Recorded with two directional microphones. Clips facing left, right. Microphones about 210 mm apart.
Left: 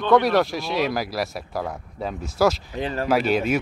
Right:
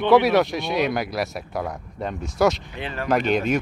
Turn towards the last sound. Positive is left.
turn(degrees=5)  # may be behind; listen again after turning